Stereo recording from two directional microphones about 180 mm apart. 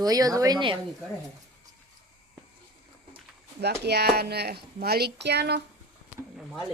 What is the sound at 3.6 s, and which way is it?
Speech, 65° right (ahead or behind).